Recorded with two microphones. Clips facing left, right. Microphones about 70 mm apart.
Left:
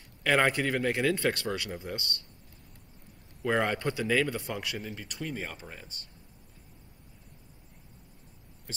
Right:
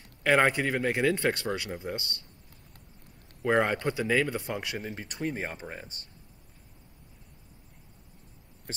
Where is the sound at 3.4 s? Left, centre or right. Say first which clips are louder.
Right 3 dB; right.